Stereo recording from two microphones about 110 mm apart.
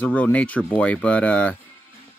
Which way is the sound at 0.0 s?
15° left (ahead or behind).